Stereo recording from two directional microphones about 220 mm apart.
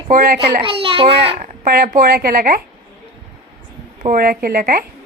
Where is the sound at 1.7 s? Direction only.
45° right (ahead or behind).